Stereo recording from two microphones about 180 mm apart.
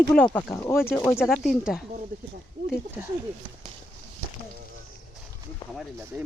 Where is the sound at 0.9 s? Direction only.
5° left (ahead or behind).